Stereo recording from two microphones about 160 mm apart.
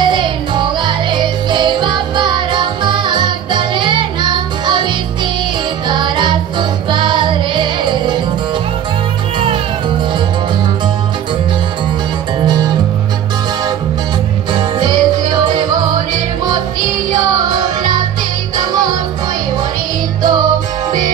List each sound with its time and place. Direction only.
0.0 s music: 30° right (ahead or behind)
14.5 s music: 30° right (ahead or behind)
17.3 s music: 25° right (ahead or behind)
20.2 s music: 25° right (ahead or behind)